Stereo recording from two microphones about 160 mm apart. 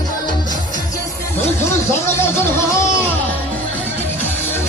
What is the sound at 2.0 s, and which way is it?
Music, 15° left (ahead or behind).